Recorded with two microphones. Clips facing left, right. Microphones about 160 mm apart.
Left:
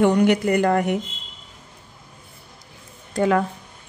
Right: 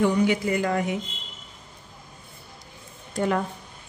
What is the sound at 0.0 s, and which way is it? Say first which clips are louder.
Speech: left 5 dB; 65° left (ahead or behind).